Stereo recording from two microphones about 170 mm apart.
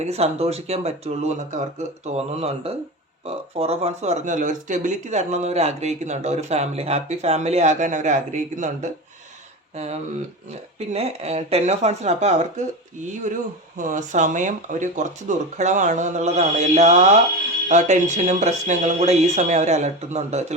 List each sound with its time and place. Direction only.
0.0 s speech: 40° right (ahead or behind)
13.7 s speech: 50° right (ahead or behind)